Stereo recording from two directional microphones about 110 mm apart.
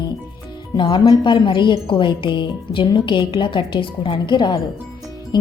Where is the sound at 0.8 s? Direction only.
45° left (ahead or behind).